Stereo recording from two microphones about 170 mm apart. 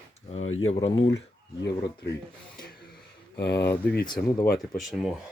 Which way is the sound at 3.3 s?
75° left (ahead or behind).